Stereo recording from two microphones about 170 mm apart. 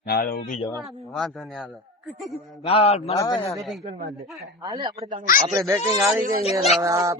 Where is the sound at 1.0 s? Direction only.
Centre (ahead or behind).